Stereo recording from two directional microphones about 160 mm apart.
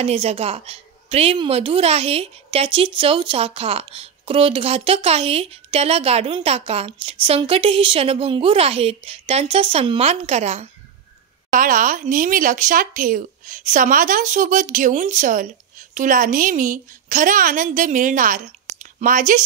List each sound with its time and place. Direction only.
0.0 s a woman's voice: 40° right (ahead or behind)
11.5 s speech: 60° right (ahead or behind)